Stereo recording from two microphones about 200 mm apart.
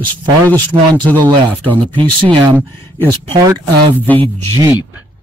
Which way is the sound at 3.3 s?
20° right (ahead or behind).